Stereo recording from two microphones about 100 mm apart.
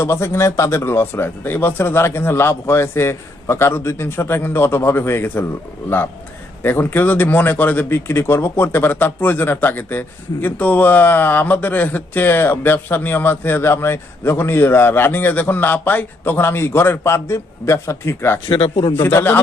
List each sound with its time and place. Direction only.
0.0 s speech: 25° left (ahead or behind)
6.6 s speech: 20° left (ahead or behind)
18.4 s speech: 65° left (ahead or behind)
19.0 s speech: 20° left (ahead or behind)